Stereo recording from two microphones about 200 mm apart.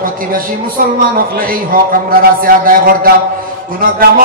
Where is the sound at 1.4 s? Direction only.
45° right (ahead or behind).